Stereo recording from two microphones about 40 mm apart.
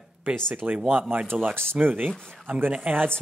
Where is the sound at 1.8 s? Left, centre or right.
Right.